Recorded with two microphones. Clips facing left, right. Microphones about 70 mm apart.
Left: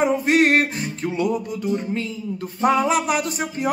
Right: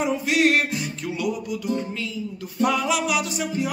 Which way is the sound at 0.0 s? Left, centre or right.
Left.